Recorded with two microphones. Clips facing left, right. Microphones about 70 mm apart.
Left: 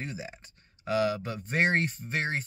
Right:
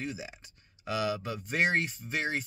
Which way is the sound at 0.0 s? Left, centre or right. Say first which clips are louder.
Even; left.